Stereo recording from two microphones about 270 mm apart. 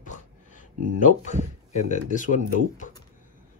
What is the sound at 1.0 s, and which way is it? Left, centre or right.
Speech, left.